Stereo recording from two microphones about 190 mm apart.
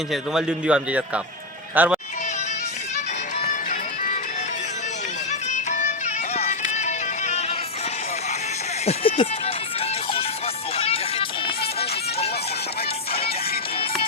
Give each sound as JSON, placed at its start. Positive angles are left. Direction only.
{"t": 0.1, "sound": "a man's voice", "side_deg": -5}
{"t": 3.5, "sound": "music", "side_deg": 45}
{"t": 5.3, "sound": "music", "side_deg": 40}
{"t": 8.8, "sound": "music", "side_deg": 30}